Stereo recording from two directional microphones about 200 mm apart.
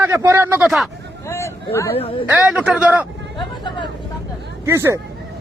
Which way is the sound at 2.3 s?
5° right (ahead or behind).